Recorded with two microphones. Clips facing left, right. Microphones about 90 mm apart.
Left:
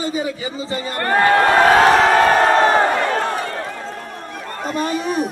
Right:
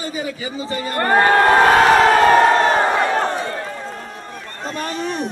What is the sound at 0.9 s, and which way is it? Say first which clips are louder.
Speech: right 3 dB; 20° right (ahead or behind).